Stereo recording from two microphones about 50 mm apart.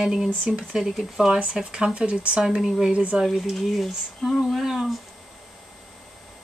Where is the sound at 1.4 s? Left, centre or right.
Centre.